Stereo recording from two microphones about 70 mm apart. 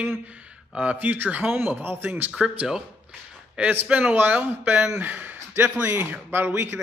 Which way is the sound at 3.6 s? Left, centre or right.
Centre.